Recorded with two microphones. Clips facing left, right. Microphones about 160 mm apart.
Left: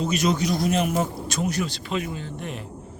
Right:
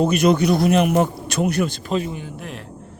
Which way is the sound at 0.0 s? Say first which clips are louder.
Right 7 dB; 55° right (ahead or behind).